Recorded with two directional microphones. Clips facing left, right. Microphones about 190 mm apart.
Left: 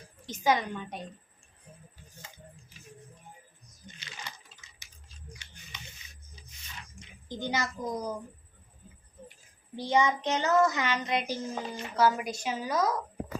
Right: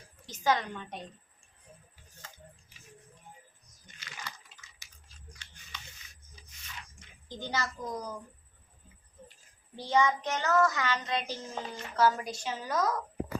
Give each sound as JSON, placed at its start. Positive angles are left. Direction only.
{"t": 0.3, "sound": "child singing", "side_deg": 15}
{"t": 4.0, "sound": "a sound", "side_deg": 25}
{"t": 7.3, "sound": "child singing", "side_deg": 15}
{"t": 9.7, "sound": "child singing", "side_deg": 15}